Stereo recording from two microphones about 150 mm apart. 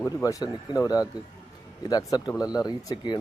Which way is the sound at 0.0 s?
20° left (ahead or behind).